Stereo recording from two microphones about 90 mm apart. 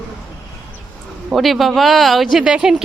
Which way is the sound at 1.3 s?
Centre (ahead or behind).